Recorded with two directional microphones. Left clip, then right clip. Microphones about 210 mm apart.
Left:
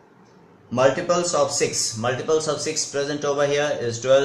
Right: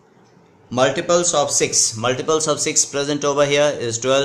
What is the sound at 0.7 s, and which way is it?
A man's voice, 40° right (ahead or behind).